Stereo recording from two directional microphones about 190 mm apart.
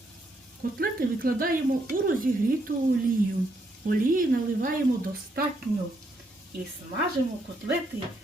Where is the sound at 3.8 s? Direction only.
45° right (ahead or behind).